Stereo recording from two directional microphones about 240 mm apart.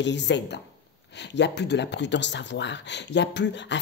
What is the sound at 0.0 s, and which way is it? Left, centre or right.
Speech, left.